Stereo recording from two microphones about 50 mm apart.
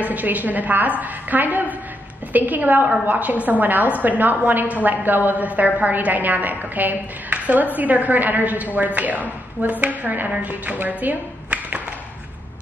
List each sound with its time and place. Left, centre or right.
0.0 s a woman's voice: right